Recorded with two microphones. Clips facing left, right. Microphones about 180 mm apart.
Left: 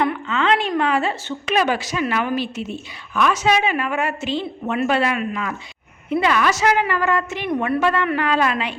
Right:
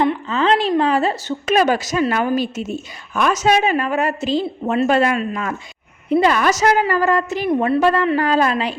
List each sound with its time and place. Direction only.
0.0 s a woman's voice: 35° right (ahead or behind)